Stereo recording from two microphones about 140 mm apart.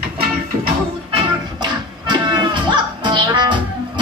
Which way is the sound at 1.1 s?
35° right (ahead or behind).